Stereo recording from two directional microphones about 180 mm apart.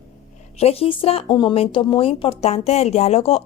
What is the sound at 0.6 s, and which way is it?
A woman's voice, 35° left (ahead or behind).